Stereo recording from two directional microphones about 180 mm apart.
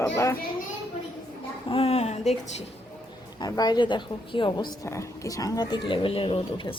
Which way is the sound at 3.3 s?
20° left (ahead or behind).